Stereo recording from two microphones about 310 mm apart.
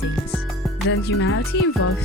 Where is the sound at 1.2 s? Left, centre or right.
Left.